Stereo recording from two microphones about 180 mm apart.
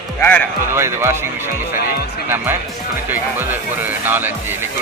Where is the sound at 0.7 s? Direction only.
15° right (ahead or behind).